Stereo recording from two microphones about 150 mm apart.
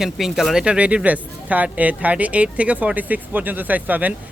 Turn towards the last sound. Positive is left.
turn(degrees=-10)  # may be behind; listen again after turning